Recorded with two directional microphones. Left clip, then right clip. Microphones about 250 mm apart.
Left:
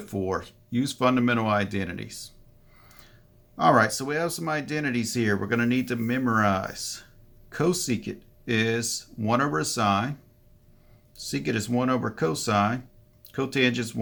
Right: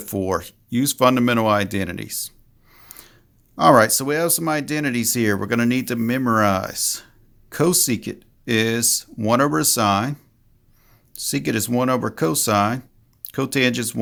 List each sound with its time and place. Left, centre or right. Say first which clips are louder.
0.0 s speech: right 6 dB; right